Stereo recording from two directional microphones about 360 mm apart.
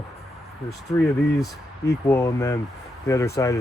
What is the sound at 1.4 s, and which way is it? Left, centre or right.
Speech, centre.